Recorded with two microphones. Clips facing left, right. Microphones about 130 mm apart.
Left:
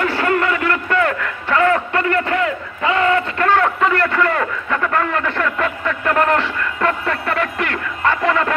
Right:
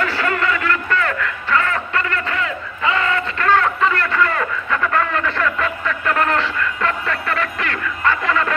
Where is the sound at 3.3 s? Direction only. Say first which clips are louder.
Left 1 dB; 15° left (ahead or behind).